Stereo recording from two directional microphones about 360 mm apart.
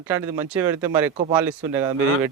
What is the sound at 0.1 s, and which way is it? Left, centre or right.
Speech, centre.